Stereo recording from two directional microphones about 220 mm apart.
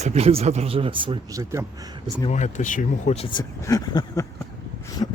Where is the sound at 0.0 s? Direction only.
30° right (ahead or behind).